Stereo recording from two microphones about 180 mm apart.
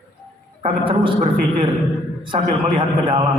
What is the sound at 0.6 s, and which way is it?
Speech, 30° right (ahead or behind).